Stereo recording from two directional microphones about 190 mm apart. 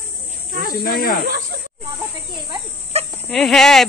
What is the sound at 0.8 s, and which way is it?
Speech, 50° left (ahead or behind).